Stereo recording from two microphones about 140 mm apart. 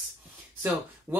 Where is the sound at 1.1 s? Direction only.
15° right (ahead or behind).